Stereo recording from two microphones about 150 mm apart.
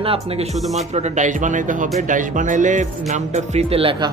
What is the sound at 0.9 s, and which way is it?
Speech, 50° right (ahead or behind).